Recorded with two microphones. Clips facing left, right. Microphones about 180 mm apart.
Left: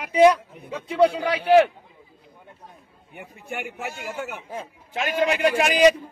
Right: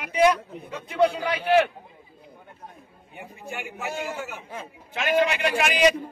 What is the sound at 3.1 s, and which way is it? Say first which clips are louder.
Speech: left 2 dB; 55° left (ahead or behind).